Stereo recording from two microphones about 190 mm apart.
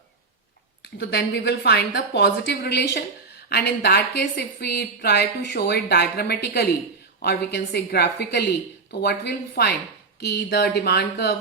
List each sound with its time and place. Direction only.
0.9 s a woman's voice: 60° left (ahead or behind)